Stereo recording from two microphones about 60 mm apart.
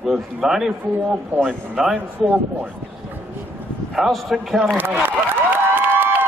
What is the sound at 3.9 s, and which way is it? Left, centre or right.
Speech, centre.